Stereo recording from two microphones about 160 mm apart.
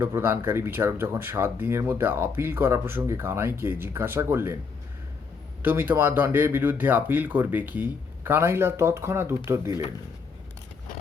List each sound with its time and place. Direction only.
0.0 s speech: 15° right (ahead or behind)
5.6 s speech: 10° right (ahead or behind)